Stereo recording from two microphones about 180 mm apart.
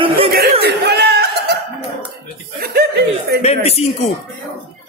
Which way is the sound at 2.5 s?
60° right (ahead or behind).